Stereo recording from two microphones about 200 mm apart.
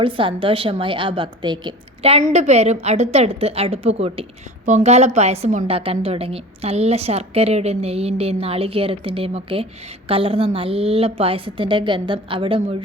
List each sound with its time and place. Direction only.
0.0 s a woman's voice: 25° right (ahead or behind)